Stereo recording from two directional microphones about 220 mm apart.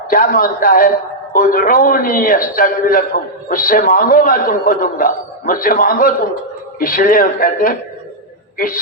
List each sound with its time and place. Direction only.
0.1 s a man's voice: 40° left (ahead or behind)